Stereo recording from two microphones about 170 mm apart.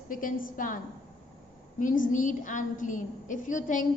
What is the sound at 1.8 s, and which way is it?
A woman's voice, 50° left (ahead or behind).